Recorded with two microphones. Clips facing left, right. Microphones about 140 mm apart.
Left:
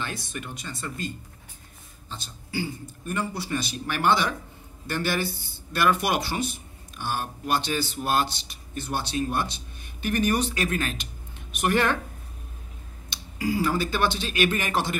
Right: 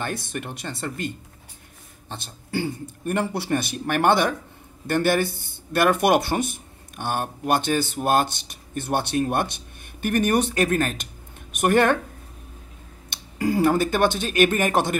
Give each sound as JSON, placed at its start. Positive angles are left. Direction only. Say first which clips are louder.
{"t": 0.0, "sound": "a man's voice", "louder": "right 5 dB", "side_deg": -55}
{"t": 13.1, "sound": "speech", "louder": "right 4 dB", "side_deg": -55}